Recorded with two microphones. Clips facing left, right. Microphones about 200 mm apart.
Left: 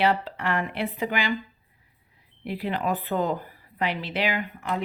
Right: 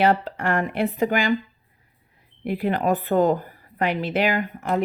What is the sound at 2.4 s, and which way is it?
A woman's voice, 50° right (ahead or behind).